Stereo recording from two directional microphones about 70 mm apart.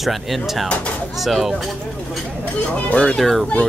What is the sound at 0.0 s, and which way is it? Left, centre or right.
Speech, centre.